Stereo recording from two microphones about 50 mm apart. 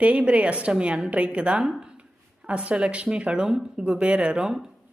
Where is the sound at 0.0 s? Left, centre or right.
Right.